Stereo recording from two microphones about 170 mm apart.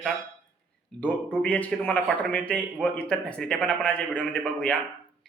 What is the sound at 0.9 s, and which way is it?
A man's voice, 10° left (ahead or behind).